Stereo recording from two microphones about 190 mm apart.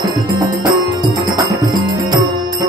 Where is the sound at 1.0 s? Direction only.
20° right (ahead or behind).